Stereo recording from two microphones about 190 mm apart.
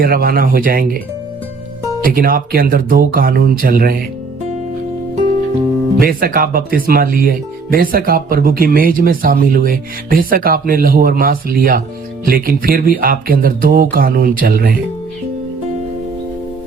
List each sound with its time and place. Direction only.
0.0 s speech: 50° right (ahead or behind)
2.0 s speech: 50° right (ahead or behind)
6.0 s speech: 50° right (ahead or behind)